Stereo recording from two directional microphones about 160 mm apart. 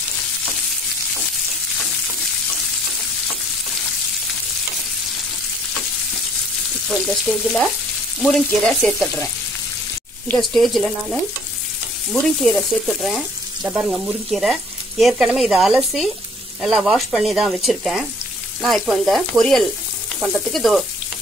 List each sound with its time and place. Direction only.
6.9 s frying: centre (ahead or behind)